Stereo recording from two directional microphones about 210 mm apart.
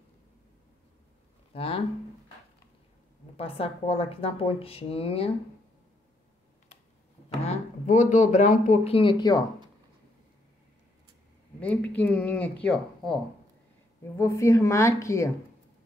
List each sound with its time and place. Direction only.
1.5 s speech: 25° left (ahead or behind)
3.3 s speech: 25° left (ahead or behind)
7.4 s speech: 35° left (ahead or behind)
11.6 s speech: 5° left (ahead or behind)